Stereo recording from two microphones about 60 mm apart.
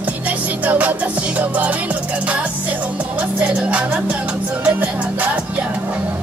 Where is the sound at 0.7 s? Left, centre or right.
Right.